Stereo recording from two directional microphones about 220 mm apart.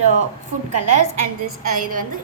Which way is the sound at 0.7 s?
90° right.